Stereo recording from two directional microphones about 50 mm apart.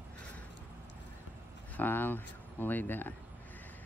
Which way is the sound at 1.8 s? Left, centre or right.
Left.